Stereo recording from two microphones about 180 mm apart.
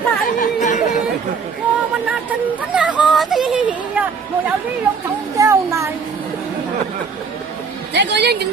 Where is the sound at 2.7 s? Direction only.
5° right (ahead or behind).